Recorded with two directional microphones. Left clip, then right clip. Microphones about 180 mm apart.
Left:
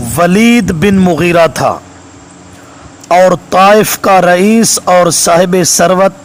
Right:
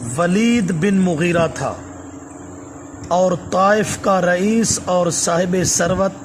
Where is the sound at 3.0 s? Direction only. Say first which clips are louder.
Left 10 dB; 40° left (ahead or behind).